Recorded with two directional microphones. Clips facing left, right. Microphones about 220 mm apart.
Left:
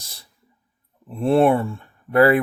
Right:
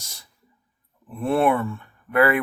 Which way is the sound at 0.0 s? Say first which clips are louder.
Left 1 dB; 35° left (ahead or behind).